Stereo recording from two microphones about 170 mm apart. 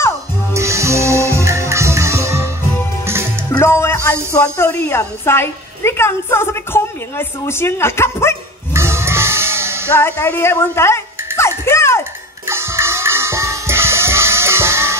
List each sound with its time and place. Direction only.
0.5 s music: 15° right (ahead or behind)
3.5 s music: 15° left (ahead or behind)
4.3 s a woman's voice: 15° left (ahead or behind)
8.7 s music: 15° right (ahead or behind)
9.9 s music: 15° left (ahead or behind)
12.4 s music: 15° right (ahead or behind)